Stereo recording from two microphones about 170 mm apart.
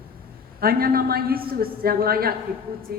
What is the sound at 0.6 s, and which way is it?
A woman's voice, 60° right (ahead or behind).